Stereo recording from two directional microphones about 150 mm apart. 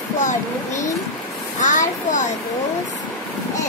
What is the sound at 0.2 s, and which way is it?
A child's voice, 55° left (ahead or behind).